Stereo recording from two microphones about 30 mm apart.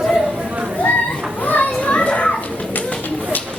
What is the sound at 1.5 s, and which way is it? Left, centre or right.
Children playing, left.